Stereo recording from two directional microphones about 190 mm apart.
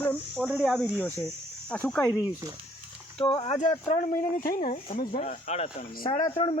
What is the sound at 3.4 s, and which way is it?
Speech, 40° left (ahead or behind).